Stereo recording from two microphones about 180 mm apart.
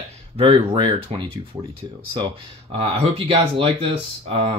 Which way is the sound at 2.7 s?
30° right (ahead or behind).